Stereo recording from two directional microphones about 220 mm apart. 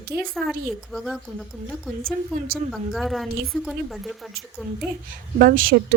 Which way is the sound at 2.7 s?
Centre (ahead or behind).